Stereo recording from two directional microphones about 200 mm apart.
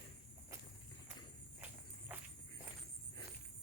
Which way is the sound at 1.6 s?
10° right (ahead or behind).